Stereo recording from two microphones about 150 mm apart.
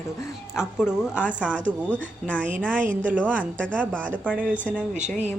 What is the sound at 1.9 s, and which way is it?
Speech, 10° left (ahead or behind).